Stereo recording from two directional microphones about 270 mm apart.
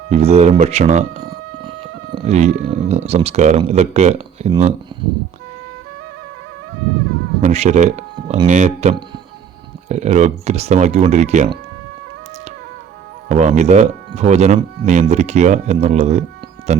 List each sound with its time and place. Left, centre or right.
0.1 s speech: right
7.4 s speech: right
13.2 s speech: right